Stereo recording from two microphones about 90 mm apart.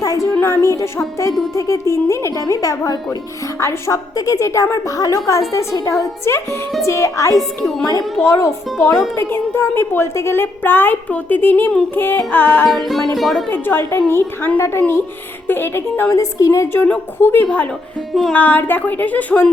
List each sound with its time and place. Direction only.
0.0 s a sound: 40° left (ahead or behind)
0.3 s a woman's voice: 30° left (ahead or behind)
7.3 s a woman's voice: centre (ahead or behind)
8.2 s speech: 30° left (ahead or behind)
12.6 s a woman's voice: centre (ahead or behind)
13.5 s a woman's voice: 25° left (ahead or behind)
18.1 s a woman's voice: centre (ahead or behind)
18.3 s speech: 20° left (ahead or behind)